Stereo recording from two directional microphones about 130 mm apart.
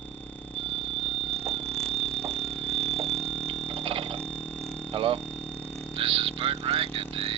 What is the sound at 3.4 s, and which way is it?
Clock, 45° right (ahead or behind).